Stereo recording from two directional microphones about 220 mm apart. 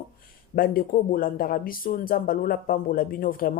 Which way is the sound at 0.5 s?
40° left (ahead or behind).